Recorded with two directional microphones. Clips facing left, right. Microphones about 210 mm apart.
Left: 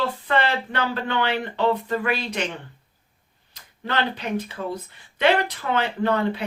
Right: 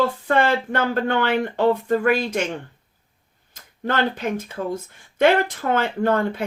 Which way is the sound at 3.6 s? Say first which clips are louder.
Right 3 dB; 50° right (ahead or behind).